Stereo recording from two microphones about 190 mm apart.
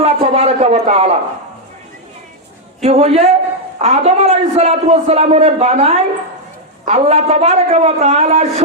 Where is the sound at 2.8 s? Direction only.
30° right (ahead or behind).